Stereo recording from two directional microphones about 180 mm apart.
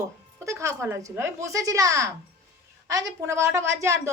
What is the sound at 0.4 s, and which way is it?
A woman's voice, 15° right (ahead or behind).